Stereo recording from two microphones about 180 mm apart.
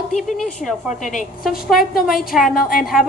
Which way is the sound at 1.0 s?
45° left (ahead or behind).